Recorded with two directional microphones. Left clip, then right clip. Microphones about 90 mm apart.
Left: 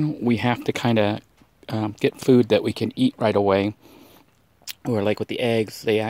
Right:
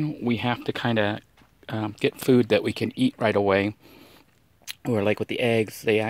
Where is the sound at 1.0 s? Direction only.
90° left; by 3.7 s 35° left (ahead or behind).